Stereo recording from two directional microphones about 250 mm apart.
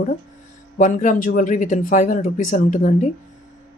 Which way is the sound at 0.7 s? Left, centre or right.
Left.